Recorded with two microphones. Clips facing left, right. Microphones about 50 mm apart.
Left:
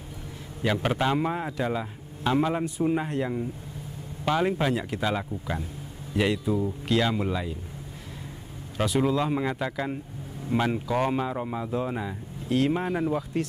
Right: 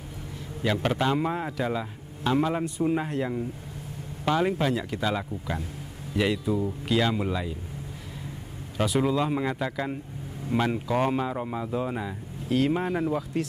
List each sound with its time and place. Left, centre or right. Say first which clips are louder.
0.6 s a man's voice: even; centre
0.8 s speech: even; centre
8.7 s speech: even; centre